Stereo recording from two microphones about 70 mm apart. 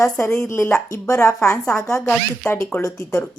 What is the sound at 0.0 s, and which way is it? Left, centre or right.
Speech, left.